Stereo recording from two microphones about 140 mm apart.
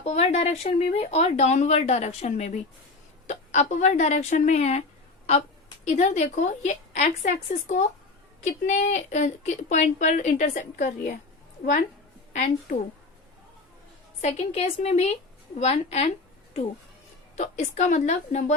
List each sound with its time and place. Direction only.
0.0 s a woman's voice: 55° left (ahead or behind)
5.8 s a woman's voice: 55° left (ahead or behind)
11.6 s a woman's voice: 75° left (ahead or behind)
12.3 s a woman's voice: 60° left (ahead or behind)
14.2 s speech: 50° left (ahead or behind)
17.3 s a woman's voice: 55° left (ahead or behind)